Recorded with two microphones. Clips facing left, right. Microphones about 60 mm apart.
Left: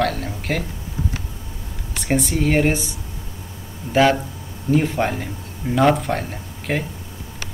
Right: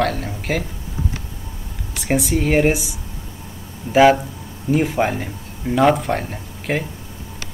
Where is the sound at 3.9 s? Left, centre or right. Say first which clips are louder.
Right 4 dB; centre.